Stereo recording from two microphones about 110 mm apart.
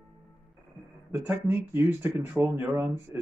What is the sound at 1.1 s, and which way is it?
Speech, 20° right (ahead or behind).